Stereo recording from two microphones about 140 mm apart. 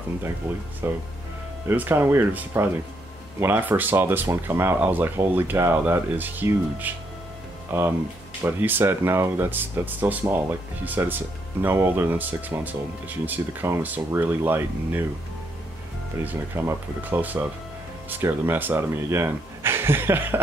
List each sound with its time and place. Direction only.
0.8 s speech: 15° right (ahead or behind)
16.3 s speech: 15° right (ahead or behind)